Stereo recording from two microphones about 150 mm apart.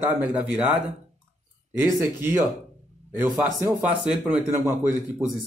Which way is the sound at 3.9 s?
10° right (ahead or behind).